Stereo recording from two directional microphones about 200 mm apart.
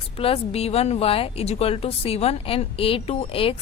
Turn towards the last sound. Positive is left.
turn(degrees=25)  # may be behind; listen again after turning